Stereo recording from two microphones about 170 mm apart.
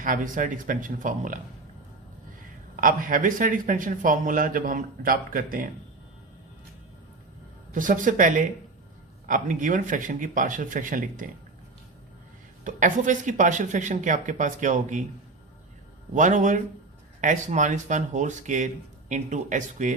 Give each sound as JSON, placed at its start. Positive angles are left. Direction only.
{"t": 0.0, "sound": "speech", "side_deg": -50}
{"t": 2.8, "sound": "speech", "side_deg": -55}
{"t": 7.7, "sound": "speech", "side_deg": -50}
{"t": 12.6, "sound": "speech", "side_deg": -50}
{"t": 16.1, "sound": "speech", "side_deg": -45}